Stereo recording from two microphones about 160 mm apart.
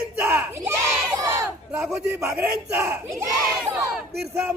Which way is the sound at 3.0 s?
20° right (ahead or behind).